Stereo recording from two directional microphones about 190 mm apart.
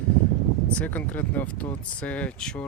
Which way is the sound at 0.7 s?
10° left (ahead or behind).